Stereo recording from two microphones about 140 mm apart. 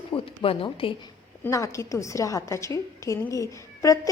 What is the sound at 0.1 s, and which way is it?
Speech, 40° left (ahead or behind).